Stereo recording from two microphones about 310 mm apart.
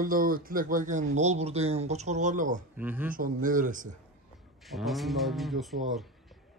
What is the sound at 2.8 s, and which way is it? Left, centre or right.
Speech, centre.